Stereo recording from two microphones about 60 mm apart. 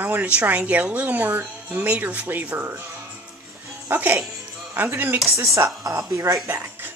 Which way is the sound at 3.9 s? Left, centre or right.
Right.